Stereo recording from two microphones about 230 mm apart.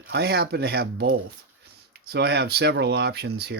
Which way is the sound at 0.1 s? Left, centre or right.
Right.